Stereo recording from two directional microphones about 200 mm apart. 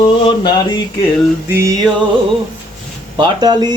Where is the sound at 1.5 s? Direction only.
15° right (ahead or behind).